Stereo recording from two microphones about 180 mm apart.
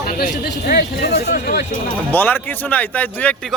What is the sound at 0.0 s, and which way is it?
Speech, 50° left (ahead or behind).